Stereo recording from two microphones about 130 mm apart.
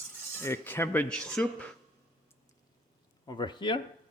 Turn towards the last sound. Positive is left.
turn(degrees=35)  # may be behind; listen again after turning